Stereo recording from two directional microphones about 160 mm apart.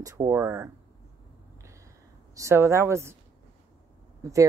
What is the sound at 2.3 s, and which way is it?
Speech, 20° right (ahead or behind).